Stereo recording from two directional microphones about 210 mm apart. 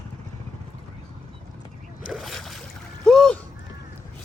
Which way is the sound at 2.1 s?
Centre (ahead or behind).